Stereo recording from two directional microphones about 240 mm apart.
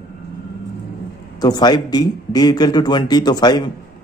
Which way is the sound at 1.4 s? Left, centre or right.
Centre.